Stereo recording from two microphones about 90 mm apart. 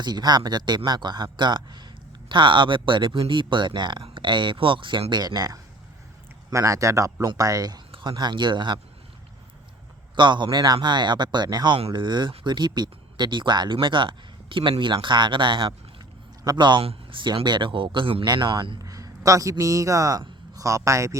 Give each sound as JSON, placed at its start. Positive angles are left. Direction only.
{"t": 0.0, "sound": "speech", "side_deg": -50}
{"t": 6.5, "sound": "speech", "side_deg": -35}
{"t": 10.2, "sound": "speech", "side_deg": -60}
{"t": 18.3, "sound": "speech", "side_deg": -55}
{"t": 18.8, "sound": "a man's voice", "side_deg": -40}